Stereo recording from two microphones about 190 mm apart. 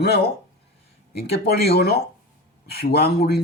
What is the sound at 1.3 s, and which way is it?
Speech, 60° left (ahead or behind).